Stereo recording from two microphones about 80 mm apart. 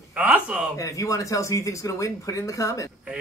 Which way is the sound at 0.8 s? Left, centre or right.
Left.